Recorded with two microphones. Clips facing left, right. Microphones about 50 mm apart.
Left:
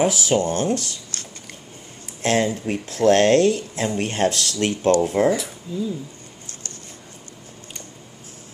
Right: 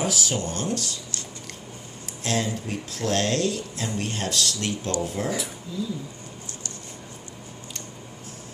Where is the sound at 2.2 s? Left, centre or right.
Left.